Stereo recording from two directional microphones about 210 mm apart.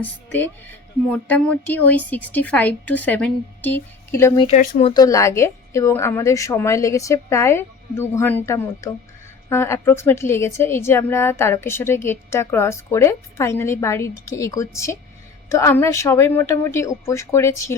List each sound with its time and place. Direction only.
0.0 s a woman's voice: 10° left (ahead or behind)
4.4 s speech: 40° left (ahead or behind)
4.8 s a woman's voice: 20° left (ahead or behind)